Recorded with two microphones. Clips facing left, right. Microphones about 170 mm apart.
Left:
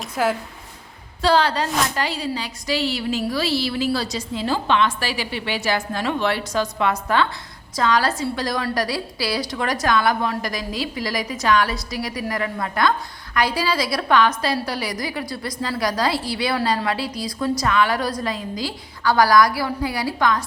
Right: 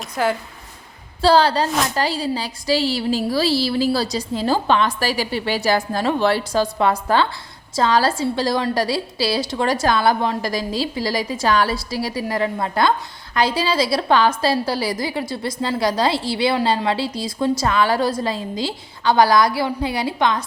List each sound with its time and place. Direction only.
0.2 s speech: centre (ahead or behind)
1.2 s a woman's voice: 35° right (ahead or behind)